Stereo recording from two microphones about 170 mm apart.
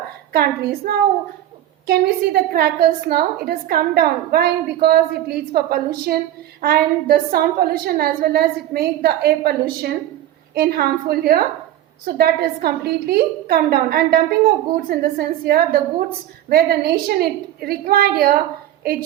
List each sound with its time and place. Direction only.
0.3 s a woman's voice: 65° right (ahead or behind)